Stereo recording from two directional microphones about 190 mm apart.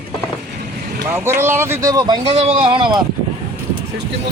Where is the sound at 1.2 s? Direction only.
15° right (ahead or behind).